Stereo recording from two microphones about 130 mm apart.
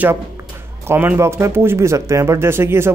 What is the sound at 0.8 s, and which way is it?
Speech, 15° right (ahead or behind).